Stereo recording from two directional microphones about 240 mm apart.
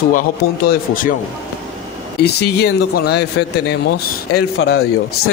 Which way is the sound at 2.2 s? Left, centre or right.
Left.